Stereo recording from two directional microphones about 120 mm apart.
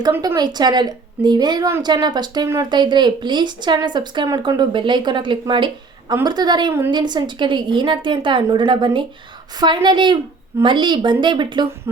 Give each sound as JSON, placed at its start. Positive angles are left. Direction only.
{"t": 0.3, "sound": "a woman's voice", "side_deg": -35}